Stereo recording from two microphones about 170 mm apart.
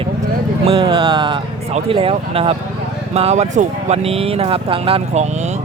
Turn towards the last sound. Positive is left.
turn(degrees=-40)  # may be behind; listen again after turning